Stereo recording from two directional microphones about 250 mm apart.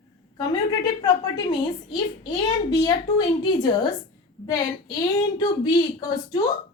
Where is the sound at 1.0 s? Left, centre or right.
Centre.